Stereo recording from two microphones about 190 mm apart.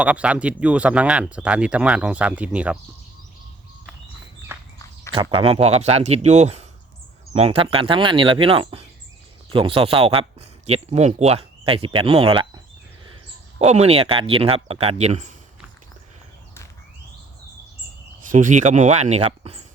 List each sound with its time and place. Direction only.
0.0 s speech: 5° right (ahead or behind)
4.5 s walk: 10° right (ahead or behind)
5.1 s speech: 30° right (ahead or behind)
13.6 s speech: 35° right (ahead or behind)
18.3 s speech: 40° right (ahead or behind)